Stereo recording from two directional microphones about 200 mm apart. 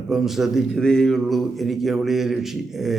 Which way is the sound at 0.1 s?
Centre (ahead or behind).